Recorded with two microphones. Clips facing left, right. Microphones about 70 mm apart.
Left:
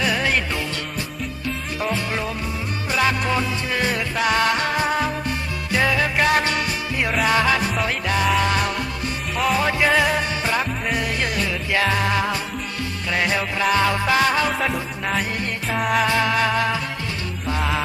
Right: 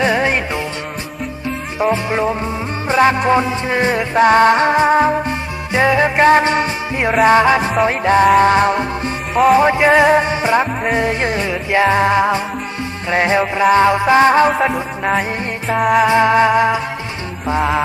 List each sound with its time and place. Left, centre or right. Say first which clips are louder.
0.0 s music: right 6 dB; right
2.0 s music: right 8 dB; right
14.5 s music: right 7 dB; centre
16.1 s music: right 8 dB; right
17.6 s music: right 8 dB; centre